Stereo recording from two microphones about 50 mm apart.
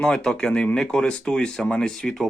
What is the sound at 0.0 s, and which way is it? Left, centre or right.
Speech, centre.